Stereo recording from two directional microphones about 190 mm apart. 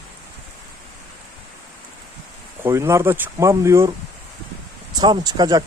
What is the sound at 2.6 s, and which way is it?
A man's voice, 15° right (ahead or behind).